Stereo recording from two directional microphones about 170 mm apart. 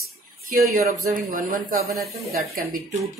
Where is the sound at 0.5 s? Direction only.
55° right (ahead or behind).